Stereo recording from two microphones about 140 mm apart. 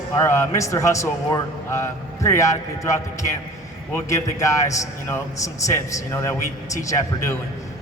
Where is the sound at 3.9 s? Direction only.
20° left (ahead or behind).